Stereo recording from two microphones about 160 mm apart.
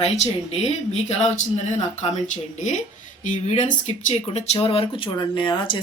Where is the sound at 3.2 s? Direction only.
50° left (ahead or behind); by 5.7 s 30° left (ahead or behind).